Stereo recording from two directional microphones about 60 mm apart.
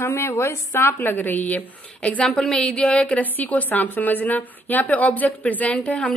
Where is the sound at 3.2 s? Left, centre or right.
Left.